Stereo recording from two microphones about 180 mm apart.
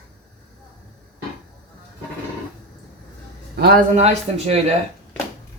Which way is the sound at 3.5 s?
60° right (ahead or behind).